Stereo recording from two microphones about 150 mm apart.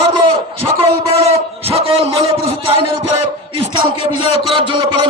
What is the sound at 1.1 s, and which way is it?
A man's voice, 40° right (ahead or behind).